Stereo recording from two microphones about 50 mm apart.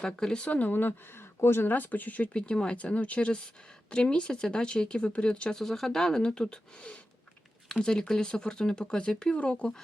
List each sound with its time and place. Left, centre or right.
0.0 s speech: centre
0.5 s speech: left
1.6 s speech: left
2.5 s speech: centre
5.5 s speech: centre